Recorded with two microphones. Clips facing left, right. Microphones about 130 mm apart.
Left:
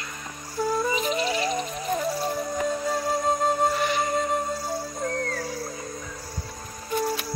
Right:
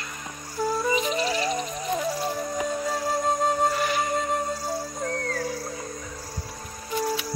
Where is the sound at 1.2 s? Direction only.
30° right (ahead or behind).